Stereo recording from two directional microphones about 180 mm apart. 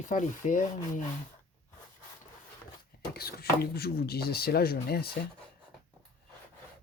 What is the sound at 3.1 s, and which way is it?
Speech, 60° left (ahead or behind).